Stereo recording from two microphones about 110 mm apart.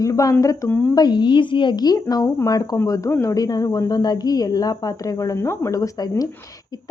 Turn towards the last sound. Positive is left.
turn(degrees=35)  # may be behind; listen again after turning